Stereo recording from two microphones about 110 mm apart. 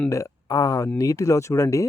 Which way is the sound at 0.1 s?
30° left (ahead or behind).